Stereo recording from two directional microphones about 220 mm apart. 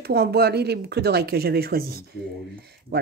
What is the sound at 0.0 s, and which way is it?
Speech, 45° right (ahead or behind).